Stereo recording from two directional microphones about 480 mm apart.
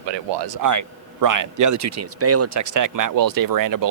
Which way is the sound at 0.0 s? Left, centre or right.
Right.